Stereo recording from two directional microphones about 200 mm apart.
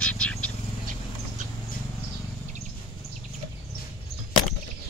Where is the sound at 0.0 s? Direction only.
5° left (ahead or behind).